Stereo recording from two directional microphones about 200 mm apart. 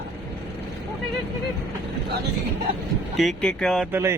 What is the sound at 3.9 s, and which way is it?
Speech, 15° right (ahead or behind).